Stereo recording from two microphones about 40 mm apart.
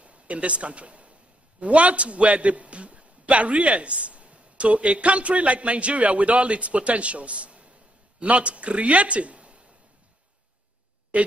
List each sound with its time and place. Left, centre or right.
0.0 s a man's voice: right
11.1 s speech: right